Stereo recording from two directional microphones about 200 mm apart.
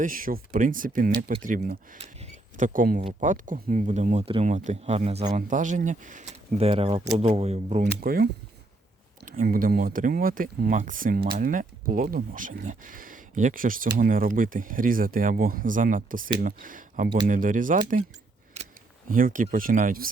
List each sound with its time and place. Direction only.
0.0 s speech: 45° right (ahead or behind)
3.0 s speech: 35° right (ahead or behind)
8.0 s speech: 45° right (ahead or behind)